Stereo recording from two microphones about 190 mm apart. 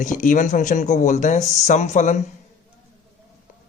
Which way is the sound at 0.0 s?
40° left (ahead or behind).